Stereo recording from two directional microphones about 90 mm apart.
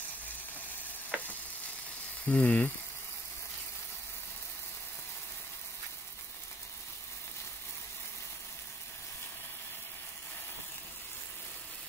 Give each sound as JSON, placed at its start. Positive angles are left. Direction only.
{"t": 1.1, "sound": "sizzle", "side_deg": -10}
{"t": 2.2, "sound": "speech", "side_deg": 15}